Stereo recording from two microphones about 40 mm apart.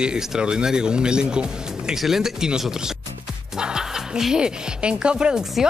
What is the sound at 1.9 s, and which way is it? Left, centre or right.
Speech, centre.